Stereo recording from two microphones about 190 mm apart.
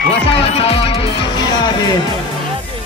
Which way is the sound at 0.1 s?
30° left (ahead or behind).